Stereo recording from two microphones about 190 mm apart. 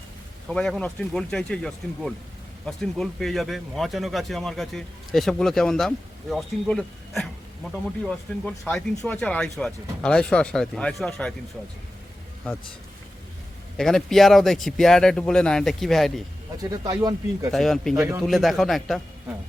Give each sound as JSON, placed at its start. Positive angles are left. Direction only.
{"t": 0.4, "sound": "speech", "side_deg": 5}
{"t": 8.4, "sound": "speech", "side_deg": 5}
{"t": 13.7, "sound": "speech", "side_deg": 5}
{"t": 16.6, "sound": "speech", "side_deg": -20}
{"t": 17.5, "sound": "speech", "side_deg": 0}